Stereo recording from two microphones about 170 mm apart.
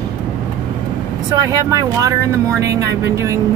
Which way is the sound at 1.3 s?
20° right (ahead or behind).